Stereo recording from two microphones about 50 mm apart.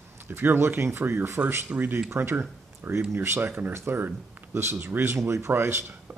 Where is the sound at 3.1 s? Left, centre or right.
Right.